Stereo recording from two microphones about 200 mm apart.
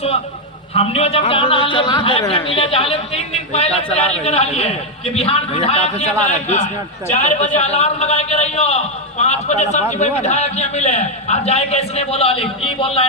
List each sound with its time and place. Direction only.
0.7 s a man's voice: 30° left (ahead or behind)
3.7 s speech: 5° left (ahead or behind)
4.2 s a man's voice: 30° left (ahead or behind)